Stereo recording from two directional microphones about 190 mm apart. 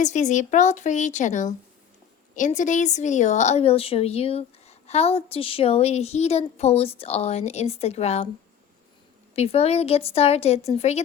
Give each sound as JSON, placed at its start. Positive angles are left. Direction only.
{"t": 0.0, "sound": "a woman's voice", "side_deg": 40}
{"t": 9.3, "sound": "a woman's voice", "side_deg": 35}